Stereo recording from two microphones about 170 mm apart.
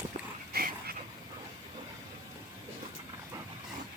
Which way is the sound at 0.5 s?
60° right (ahead or behind).